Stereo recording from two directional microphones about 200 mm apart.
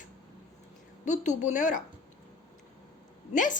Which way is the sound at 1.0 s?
35° left (ahead or behind).